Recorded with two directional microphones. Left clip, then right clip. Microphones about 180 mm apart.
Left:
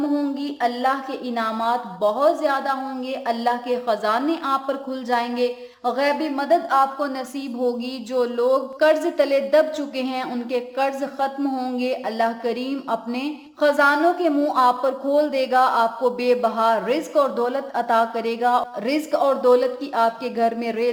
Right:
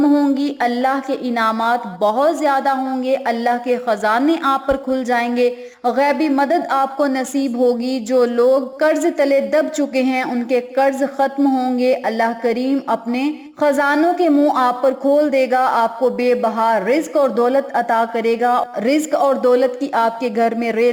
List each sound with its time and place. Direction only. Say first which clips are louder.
0.0 s speech: right 8 dB; 30° right (ahead or behind)